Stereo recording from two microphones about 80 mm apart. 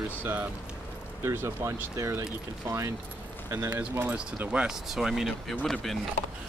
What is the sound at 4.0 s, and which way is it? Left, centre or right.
Speech, centre.